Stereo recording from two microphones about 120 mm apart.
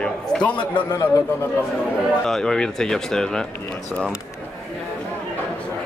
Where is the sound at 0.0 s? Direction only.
10° left (ahead or behind).